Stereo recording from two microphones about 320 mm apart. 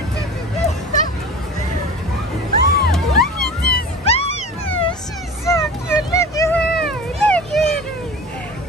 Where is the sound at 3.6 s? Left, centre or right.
Left; by 7.7 s centre.